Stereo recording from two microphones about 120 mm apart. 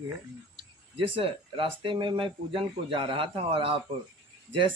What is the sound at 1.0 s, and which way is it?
Speech, 50° right (ahead or behind).